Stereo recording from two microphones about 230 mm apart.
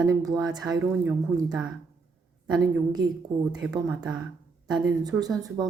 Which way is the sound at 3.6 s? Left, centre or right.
Centre.